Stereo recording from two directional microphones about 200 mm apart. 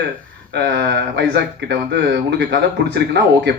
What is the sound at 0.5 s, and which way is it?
Speech, 60° right (ahead or behind).